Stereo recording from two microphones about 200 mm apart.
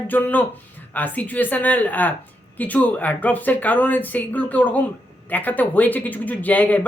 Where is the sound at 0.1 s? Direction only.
10° left (ahead or behind).